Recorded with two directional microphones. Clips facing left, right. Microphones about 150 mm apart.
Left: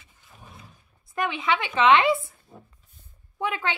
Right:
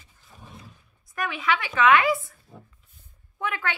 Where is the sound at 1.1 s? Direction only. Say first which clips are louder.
Left 1 dB; 25° left (ahead or behind).